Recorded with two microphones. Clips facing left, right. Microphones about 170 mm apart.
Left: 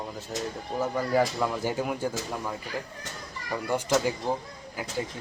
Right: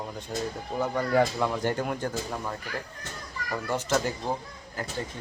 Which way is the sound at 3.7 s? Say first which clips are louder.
Left 2 dB; 10° left (ahead or behind).